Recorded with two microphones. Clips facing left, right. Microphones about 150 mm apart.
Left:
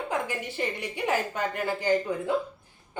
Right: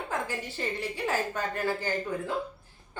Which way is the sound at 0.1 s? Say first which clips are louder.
Left 1 dB; 15° left (ahead or behind).